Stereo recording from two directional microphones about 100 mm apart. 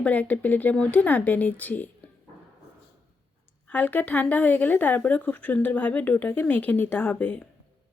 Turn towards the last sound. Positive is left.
turn(degrees=20)  # may be behind; listen again after turning